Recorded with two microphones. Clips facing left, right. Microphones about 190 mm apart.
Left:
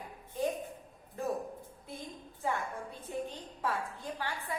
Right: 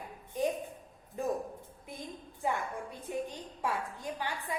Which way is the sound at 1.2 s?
15° right (ahead or behind).